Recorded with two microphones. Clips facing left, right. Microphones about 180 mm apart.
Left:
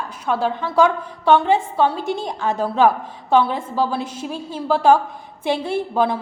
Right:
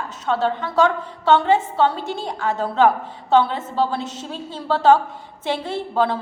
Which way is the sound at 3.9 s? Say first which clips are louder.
Left 2 dB; 10° left (ahead or behind).